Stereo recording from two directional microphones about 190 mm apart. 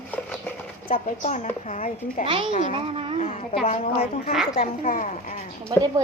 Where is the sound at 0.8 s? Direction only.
40° left (ahead or behind).